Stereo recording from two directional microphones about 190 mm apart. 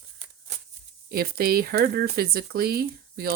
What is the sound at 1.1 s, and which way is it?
Speech, 55° right (ahead or behind).